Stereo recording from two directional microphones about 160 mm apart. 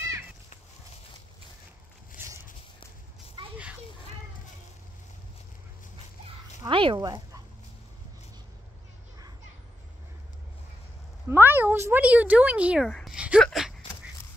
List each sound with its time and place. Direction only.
2.2 s walk: 15° right (ahead or behind)
3.4 s a sound: 30° right (ahead or behind)
6.7 s speech: 30° right (ahead or behind)
11.2 s speech: 15° right (ahead or behind)
12.9 s a sound: centre (ahead or behind)
13.4 s speech: centre (ahead or behind)